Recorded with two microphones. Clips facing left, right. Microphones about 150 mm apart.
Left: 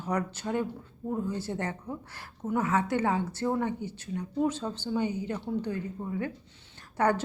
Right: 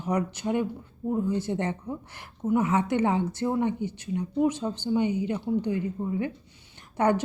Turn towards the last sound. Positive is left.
turn(degrees=-20)  # may be behind; listen again after turning